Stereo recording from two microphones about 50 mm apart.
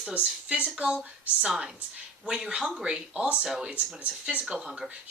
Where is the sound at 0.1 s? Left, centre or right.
Right.